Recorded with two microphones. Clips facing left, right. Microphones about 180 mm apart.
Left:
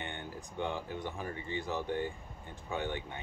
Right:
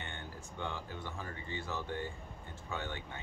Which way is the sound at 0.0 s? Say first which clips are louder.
Left 4 dB; 15° left (ahead or behind).